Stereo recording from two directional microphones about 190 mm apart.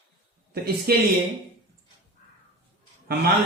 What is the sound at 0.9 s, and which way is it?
Speech, 55° right (ahead or behind).